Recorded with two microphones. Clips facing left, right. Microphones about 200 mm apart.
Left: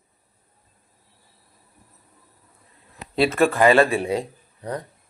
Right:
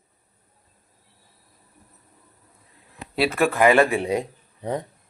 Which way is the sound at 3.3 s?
15° right (ahead or behind).